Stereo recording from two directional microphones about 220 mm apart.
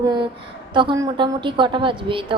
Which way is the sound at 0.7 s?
20° right (ahead or behind).